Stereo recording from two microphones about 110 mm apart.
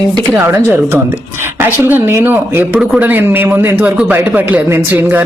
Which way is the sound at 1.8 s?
20° right (ahead or behind).